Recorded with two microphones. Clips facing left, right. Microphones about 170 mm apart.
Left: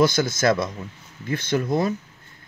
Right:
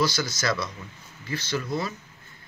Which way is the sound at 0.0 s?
50° left (ahead or behind).